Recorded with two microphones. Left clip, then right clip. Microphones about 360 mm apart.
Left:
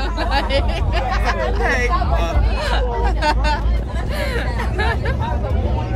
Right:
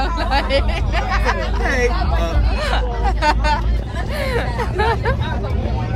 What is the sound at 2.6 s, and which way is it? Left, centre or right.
Speech, centre.